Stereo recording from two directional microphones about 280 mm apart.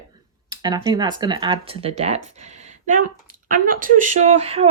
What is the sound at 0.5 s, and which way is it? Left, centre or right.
Speech, centre.